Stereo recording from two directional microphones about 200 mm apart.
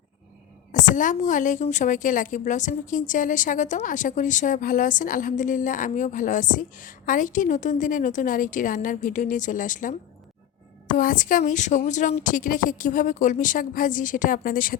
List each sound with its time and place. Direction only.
0.7 s a woman's voice: 40° left (ahead or behind)